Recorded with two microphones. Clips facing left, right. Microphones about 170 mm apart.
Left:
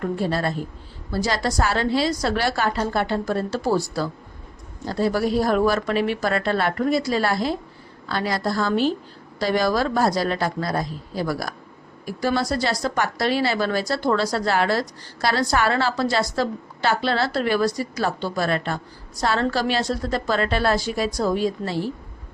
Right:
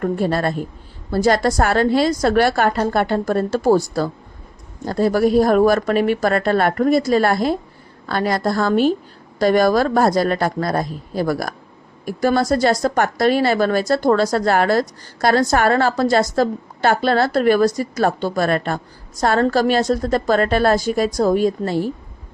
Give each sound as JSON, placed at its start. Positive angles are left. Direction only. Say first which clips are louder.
{"t": 0.0, "sound": "a woman's voice", "louder": "right 4 dB", "side_deg": -55}